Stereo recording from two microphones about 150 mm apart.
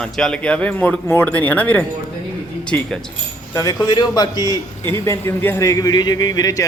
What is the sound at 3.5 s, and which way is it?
A man's voice, 25° left (ahead or behind).